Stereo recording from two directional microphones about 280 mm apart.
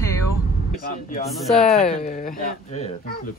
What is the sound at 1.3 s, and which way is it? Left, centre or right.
Speech, centre.